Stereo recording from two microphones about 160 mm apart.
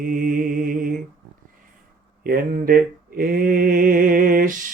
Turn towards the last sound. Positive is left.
turn(degrees=-60)  # may be behind; listen again after turning